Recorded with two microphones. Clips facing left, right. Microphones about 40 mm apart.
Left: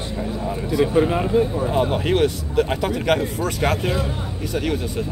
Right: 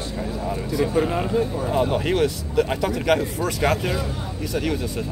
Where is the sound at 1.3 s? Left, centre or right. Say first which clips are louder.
Left 3 dB; centre.